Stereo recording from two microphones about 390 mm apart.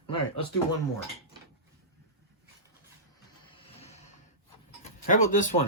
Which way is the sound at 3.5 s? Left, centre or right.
Centre.